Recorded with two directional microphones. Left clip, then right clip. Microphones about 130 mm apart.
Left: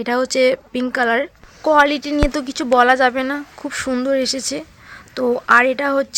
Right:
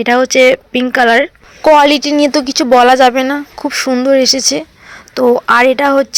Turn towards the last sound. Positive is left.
turn(degrees=-20)  # may be behind; listen again after turning